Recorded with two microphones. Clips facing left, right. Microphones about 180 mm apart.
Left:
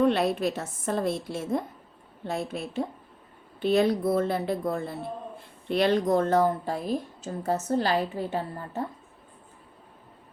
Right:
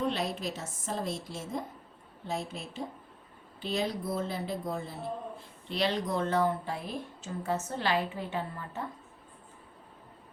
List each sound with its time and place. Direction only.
0.0 s a woman's voice: 60° left (ahead or behind); by 8.8 s 40° left (ahead or behind)